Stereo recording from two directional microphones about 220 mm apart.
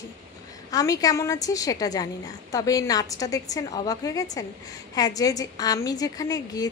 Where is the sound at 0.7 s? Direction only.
15° left (ahead or behind).